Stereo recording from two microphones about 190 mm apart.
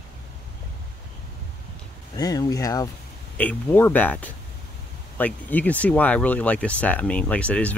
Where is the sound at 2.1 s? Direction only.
20° left (ahead or behind).